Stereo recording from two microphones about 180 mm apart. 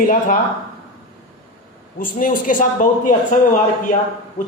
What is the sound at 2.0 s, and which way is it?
A man's voice, 50° left (ahead or behind).